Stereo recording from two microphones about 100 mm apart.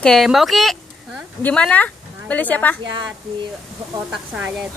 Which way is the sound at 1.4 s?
10° left (ahead or behind).